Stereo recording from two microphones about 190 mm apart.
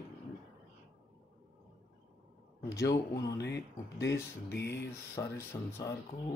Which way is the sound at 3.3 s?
65° left (ahead or behind).